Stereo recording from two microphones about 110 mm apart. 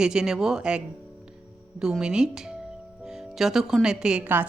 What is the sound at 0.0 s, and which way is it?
Speech, 5° right (ahead or behind).